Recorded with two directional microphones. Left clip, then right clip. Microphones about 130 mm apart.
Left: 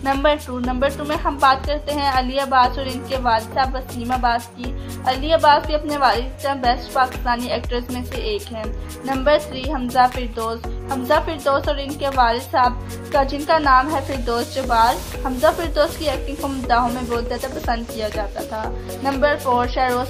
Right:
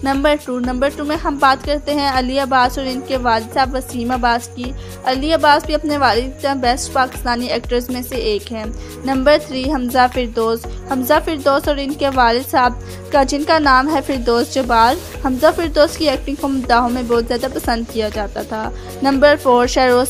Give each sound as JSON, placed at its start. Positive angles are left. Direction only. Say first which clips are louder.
{"t": 0.0, "sound": "a woman's voice", "louder": "right 2 dB", "side_deg": -45}